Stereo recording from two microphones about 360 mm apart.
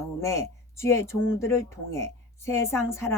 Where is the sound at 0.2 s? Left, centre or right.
Centre.